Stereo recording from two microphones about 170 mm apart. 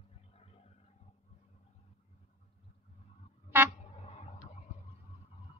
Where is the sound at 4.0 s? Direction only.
40° left (ahead or behind).